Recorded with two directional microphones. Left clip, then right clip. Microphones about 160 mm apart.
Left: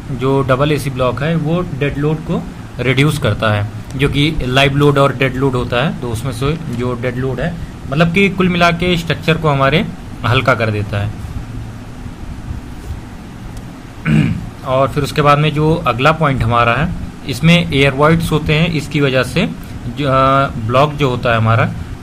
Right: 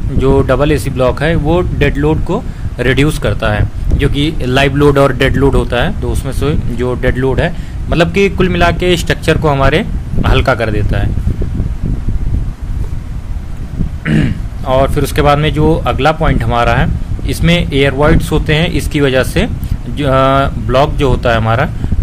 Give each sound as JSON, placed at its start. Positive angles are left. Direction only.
{"t": 0.2, "sound": "speech", "side_deg": -20}
{"t": 2.8, "sound": "speech", "side_deg": -20}
{"t": 4.5, "sound": "speech", "side_deg": -25}
{"t": 7.2, "sound": "a man's voice", "side_deg": -45}
{"t": 8.1, "sound": "speech", "side_deg": -20}
{"t": 14.0, "sound": "speech", "side_deg": -25}